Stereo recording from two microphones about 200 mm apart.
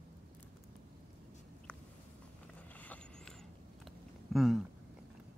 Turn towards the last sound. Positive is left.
turn(degrees=0)  # may be behind; listen again after turning